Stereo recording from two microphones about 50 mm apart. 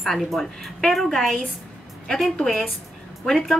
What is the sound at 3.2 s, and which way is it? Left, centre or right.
Speech, centre.